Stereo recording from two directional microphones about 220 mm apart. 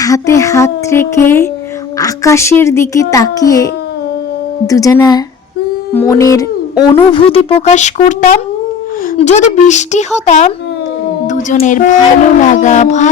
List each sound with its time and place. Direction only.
0.0 s a child's voice: 15° left (ahead or behind)
6.9 s speech: 25° left (ahead or behind)